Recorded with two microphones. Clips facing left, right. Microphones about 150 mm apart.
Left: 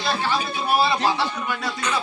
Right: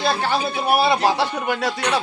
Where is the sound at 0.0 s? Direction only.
60° right (ahead or behind).